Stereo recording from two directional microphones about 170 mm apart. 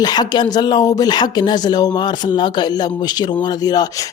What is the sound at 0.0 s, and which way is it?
Speech, 25° left (ahead or behind).